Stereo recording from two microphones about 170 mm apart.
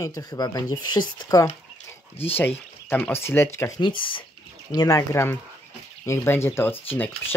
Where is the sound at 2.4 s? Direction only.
10° left (ahead or behind).